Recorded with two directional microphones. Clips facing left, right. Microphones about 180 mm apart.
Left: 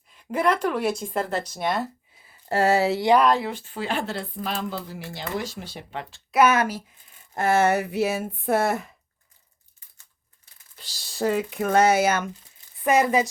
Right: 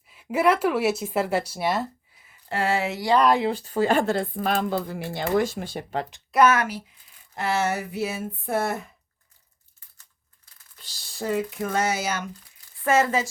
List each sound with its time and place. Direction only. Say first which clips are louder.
0.1 s speech: right 2 dB; 5° right (ahead or behind)
2.2 s a sound: left 5 dB; 40° left (ahead or behind)
3.4 s speech: right 7 dB; 35° right (ahead or behind)
6.3 s speech: even; centre (ahead or behind)
7.3 s speech: left 5 dB; 50° left (ahead or behind); by 8.7 s 85° left
10.8 s speech: left 6 dB; 80° left; by 12.2 s 55° left (ahead or behind)
12.8 s a woman's voice: left 2 dB; 15° left (ahead or behind)